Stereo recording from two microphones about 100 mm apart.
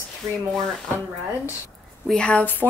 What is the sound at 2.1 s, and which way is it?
Speech, 10° left (ahead or behind).